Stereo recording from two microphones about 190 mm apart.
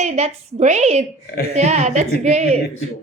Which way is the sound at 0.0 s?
35° right (ahead or behind).